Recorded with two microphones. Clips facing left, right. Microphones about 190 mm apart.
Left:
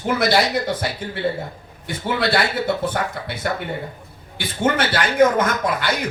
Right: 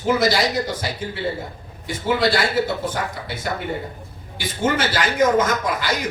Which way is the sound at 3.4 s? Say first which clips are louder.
Left 1 dB; 60° left (ahead or behind).